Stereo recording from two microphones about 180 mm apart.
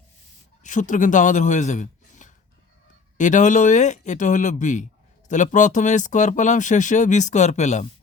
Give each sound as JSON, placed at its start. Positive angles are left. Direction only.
{"t": 0.6, "sound": "speech", "side_deg": 45}